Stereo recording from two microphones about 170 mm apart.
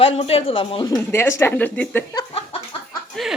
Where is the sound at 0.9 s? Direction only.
15° left (ahead or behind).